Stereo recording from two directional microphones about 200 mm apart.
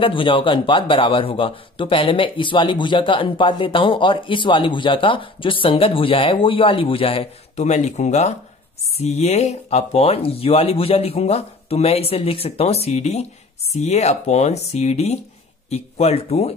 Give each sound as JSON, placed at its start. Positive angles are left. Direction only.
{"t": 0.0, "sound": "speech", "side_deg": 25}